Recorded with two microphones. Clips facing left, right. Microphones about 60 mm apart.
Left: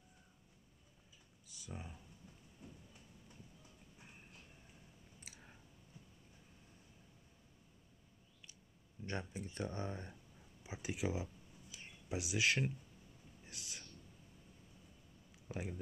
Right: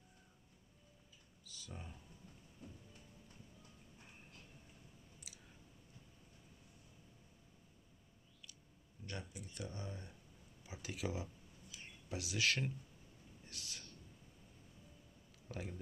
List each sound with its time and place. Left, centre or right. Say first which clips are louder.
1.4 s computer keyboard: left 2 dB; centre
5.3 s clicking: left 4 dB; left
9.0 s speech: left 5 dB; left
10.6 s speech: left 3 dB; left
11.7 s a sound: left 3 dB; centre
13.5 s thunder: even; centre
15.4 s a sound: left 3 dB; centre